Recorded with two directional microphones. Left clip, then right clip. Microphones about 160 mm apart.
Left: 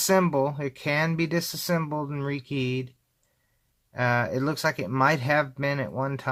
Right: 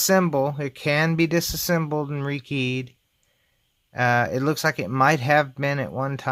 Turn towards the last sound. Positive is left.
turn(degrees=-30)  # may be behind; listen again after turning